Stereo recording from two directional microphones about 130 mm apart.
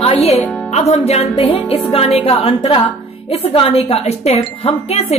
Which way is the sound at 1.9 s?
50° left (ahead or behind).